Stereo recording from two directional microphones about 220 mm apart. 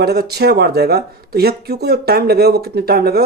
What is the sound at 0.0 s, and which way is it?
Speech, 45° right (ahead or behind).